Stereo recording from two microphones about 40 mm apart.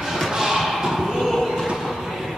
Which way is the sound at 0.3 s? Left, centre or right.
Centre.